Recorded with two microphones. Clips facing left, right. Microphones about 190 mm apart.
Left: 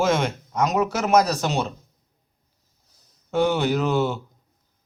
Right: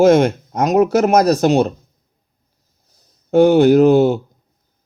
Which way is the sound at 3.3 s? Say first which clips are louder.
Right 11 dB; 50° right (ahead or behind).